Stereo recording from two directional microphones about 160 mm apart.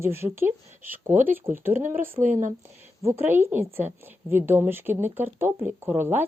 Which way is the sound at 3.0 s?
15° right (ahead or behind).